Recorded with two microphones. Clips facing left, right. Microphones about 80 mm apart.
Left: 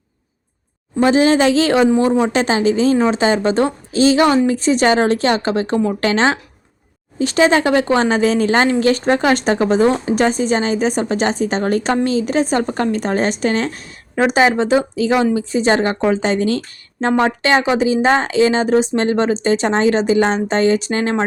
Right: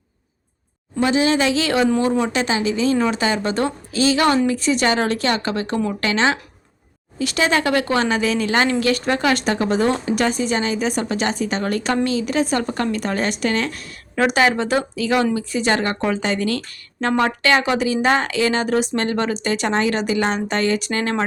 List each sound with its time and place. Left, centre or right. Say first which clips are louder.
0.9 s a woman's voice: left 5 dB; left